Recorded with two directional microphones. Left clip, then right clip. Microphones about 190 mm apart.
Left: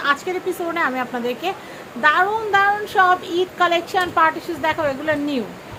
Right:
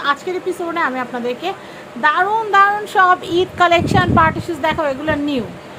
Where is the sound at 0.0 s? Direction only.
5° right (ahead or behind).